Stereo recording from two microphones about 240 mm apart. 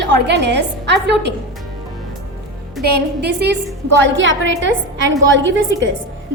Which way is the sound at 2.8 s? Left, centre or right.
Right.